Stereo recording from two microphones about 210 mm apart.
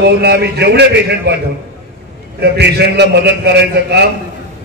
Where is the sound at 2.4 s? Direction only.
50° right (ahead or behind).